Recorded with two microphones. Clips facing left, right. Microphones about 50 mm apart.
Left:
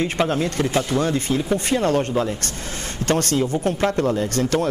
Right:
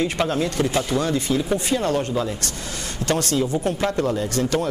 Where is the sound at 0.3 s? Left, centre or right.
Left.